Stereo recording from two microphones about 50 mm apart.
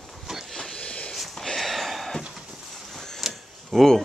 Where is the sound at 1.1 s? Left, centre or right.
Centre.